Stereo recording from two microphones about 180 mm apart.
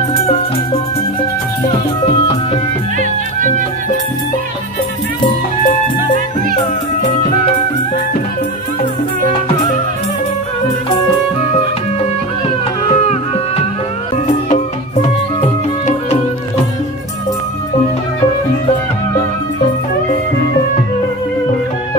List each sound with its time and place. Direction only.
3.0 s music: 45° right (ahead or behind)
12.8 s music: 35° left (ahead or behind)